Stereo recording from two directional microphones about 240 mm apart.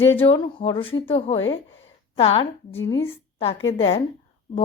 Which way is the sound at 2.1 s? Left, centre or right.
Left.